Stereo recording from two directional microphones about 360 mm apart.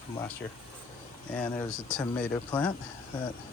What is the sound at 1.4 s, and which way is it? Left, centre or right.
Speech, centre.